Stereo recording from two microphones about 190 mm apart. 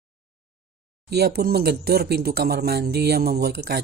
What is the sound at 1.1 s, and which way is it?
Speech, 55° right (ahead or behind).